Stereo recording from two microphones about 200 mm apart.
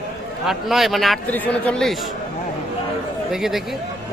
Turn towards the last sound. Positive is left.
turn(degrees=0)  # may be behind; listen again after turning